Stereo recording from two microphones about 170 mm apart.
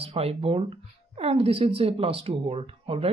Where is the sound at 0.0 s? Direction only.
35° right (ahead or behind).